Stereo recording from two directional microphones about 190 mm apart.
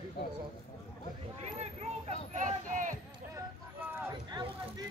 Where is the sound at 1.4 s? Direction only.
35° right (ahead or behind).